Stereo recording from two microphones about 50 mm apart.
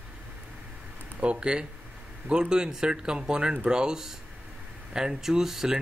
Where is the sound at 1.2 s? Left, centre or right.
Right.